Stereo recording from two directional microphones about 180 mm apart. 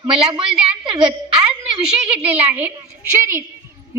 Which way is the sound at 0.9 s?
25° right (ahead or behind).